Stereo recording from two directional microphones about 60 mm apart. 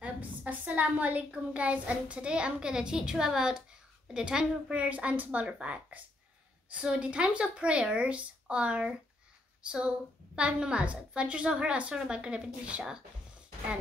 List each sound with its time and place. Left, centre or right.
0.0 s a woman's voice: right